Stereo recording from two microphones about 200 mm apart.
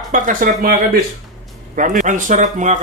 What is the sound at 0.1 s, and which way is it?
Speech, 40° right (ahead or behind).